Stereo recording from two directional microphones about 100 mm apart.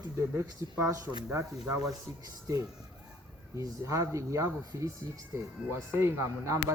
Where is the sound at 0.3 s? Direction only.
25° right (ahead or behind).